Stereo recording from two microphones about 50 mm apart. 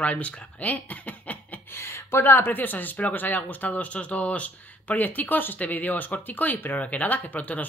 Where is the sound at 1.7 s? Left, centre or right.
Left.